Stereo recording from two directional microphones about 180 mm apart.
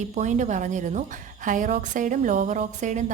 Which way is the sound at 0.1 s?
40° right (ahead or behind).